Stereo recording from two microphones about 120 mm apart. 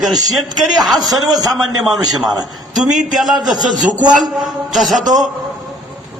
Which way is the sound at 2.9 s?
Centre (ahead or behind).